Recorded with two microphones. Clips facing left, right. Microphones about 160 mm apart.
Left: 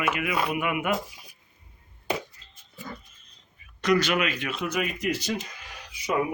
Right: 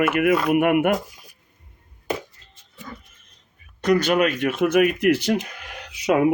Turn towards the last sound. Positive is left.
turn(degrees=-75)  # may be behind; listen again after turning